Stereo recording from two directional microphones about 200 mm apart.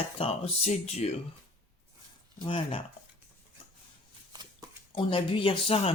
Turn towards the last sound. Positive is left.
turn(degrees=25)  # may be behind; listen again after turning